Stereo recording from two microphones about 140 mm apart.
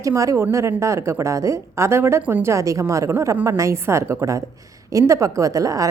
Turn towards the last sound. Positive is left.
turn(degrees=-25)  # may be behind; listen again after turning